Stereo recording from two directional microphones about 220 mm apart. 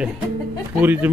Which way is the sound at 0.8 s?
10° right (ahead or behind).